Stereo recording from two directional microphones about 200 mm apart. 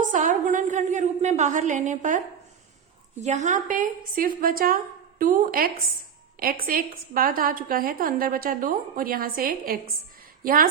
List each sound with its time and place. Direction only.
0.0 s a woman's voice: 40° right (ahead or behind)